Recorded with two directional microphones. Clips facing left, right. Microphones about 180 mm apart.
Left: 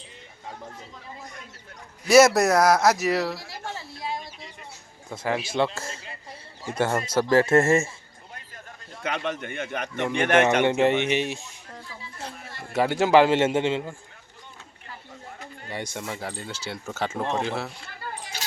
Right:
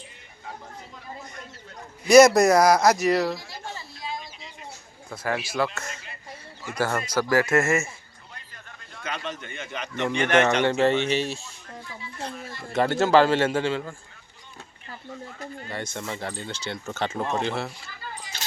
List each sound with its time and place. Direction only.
2.0 s speech: 5° left (ahead or behind)
3.3 s a sound: 75° left (ahead or behind)
5.0 s speech: 20° left (ahead or behind)
9.0 s speech: 60° left (ahead or behind)
10.7 s speech: 15° left (ahead or behind)
12.4 s speech: 60° left (ahead or behind)
12.7 s speech: 10° left (ahead or behind)
15.7 s speech: 15° left (ahead or behind)